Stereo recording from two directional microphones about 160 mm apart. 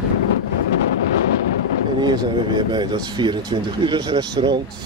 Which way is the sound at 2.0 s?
30° right (ahead or behind).